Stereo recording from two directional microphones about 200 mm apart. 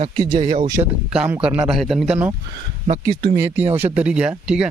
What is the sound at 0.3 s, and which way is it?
Speech, 40° right (ahead or behind).